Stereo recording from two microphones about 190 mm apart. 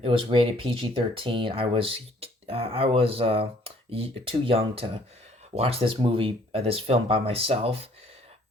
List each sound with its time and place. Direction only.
0.0 s speech: 30° right (ahead or behind)